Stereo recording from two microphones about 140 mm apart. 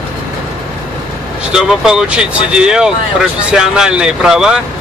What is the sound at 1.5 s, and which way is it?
Speech, 5° right (ahead or behind).